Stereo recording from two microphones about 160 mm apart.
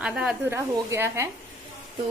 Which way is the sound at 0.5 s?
15° right (ahead or behind).